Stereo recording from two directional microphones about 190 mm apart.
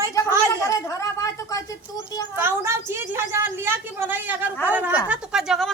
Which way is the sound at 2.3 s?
10° right (ahead or behind).